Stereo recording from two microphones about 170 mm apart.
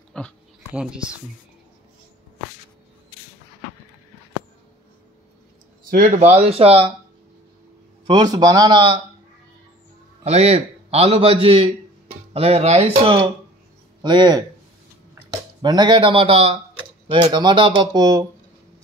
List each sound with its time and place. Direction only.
0.1 s a sound: 5° left (ahead or behind)
0.7 s speech: 5° right (ahead or behind)
5.9 s a man's voice: 55° right (ahead or behind); by 6.9 s 35° right (ahead or behind)
8.1 s speech: 25° right (ahead or behind)
10.2 s a man's voice: 35° right (ahead or behind)
15.6 s a man's voice: 25° right (ahead or behind)